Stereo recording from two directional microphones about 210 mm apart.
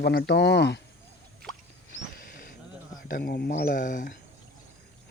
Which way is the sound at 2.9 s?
40° left (ahead or behind).